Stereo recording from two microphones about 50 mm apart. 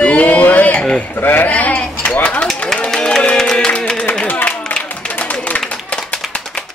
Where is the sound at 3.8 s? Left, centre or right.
Centre.